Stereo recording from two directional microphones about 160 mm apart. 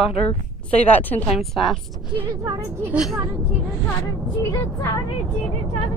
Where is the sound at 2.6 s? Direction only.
10° right (ahead or behind).